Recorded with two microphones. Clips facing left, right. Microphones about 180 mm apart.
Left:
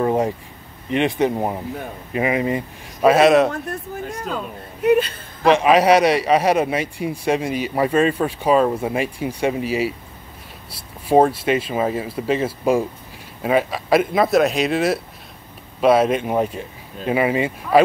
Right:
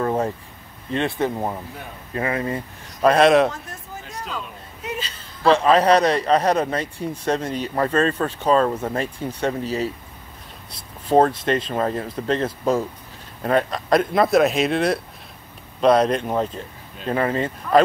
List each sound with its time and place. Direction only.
0.0 s speech: 15° left (ahead or behind)
3.0 s a man's voice: 5° left (ahead or behind)
3.5 s speech: 60° left (ahead or behind)
5.4 s a man's voice: 15° left (ahead or behind)